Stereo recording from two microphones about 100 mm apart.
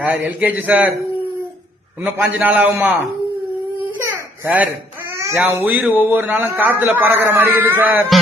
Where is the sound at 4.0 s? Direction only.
30° right (ahead or behind).